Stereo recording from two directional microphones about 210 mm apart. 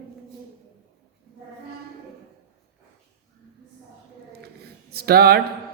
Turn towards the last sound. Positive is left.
turn(degrees=-45)  # may be behind; listen again after turning